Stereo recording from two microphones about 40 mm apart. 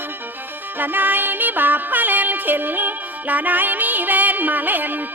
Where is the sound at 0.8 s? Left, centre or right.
Right.